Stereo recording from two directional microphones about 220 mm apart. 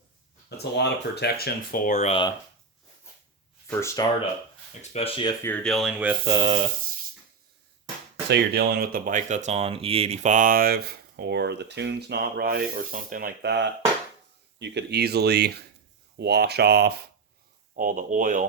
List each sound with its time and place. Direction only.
0.5 s speech: 50° left (ahead or behind); by 2.3 s 25° left (ahead or behind)
3.7 s speech: 10° left (ahead or behind)
4.8 s speech: 25° left (ahead or behind)
5.4 s speech: 10° left (ahead or behind)
6.3 s a sound: 20° right (ahead or behind)
8.3 s speech: 45° right (ahead or behind)